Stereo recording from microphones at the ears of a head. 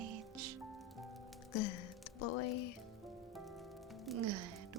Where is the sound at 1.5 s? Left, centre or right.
Left.